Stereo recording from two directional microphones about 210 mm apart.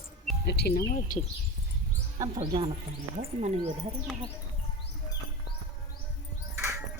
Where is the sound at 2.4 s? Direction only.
25° right (ahead or behind).